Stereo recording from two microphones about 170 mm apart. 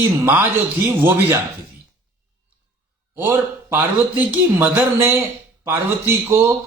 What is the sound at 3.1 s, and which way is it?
A man's voice, 15° right (ahead or behind).